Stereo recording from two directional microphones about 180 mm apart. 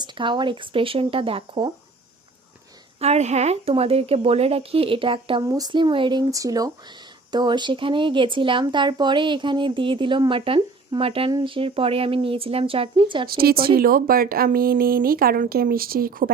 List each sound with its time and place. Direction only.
0.0 s speech: 25° right (ahead or behind)
3.0 s speech: 40° right (ahead or behind)
13.2 s speech: 55° right (ahead or behind)